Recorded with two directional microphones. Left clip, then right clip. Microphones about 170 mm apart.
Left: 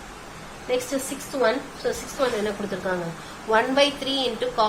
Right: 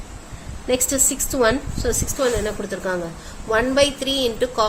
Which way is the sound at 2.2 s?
65° right (ahead or behind).